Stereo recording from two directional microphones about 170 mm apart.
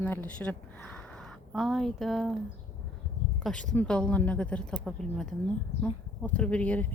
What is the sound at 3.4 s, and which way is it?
A woman's voice, 5° left (ahead or behind).